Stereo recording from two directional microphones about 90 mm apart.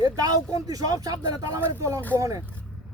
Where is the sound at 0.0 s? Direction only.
40° right (ahead or behind).